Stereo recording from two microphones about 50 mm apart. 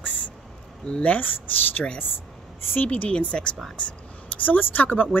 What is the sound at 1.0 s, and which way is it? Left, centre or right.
Speech, left.